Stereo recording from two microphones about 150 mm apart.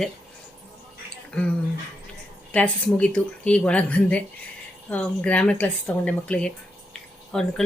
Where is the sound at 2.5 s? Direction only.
10° left (ahead or behind).